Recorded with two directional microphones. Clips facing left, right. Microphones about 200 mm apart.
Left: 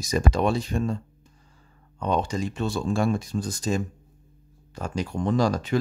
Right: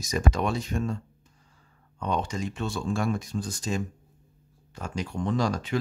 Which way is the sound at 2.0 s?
35° left (ahead or behind).